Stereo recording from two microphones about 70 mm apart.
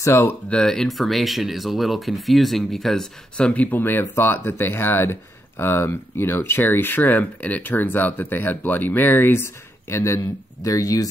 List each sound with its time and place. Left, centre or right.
0.0 s speech: left
0.5 s speech: centre
3.3 s speech: centre; by 10.7 s left
10.7 s speech: left